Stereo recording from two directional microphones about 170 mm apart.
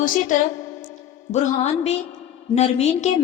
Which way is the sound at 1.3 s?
40° left (ahead or behind).